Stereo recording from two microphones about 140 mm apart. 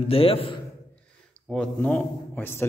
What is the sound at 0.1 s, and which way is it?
Speech, 45° left (ahead or behind).